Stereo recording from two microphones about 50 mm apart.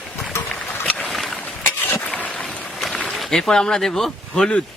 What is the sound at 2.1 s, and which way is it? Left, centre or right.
Boat, left.